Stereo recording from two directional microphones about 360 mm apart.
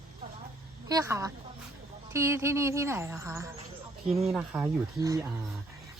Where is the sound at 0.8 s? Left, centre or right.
Centre.